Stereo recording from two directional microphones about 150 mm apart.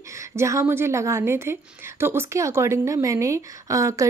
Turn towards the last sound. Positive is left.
turn(degrees=-20)  # may be behind; listen again after turning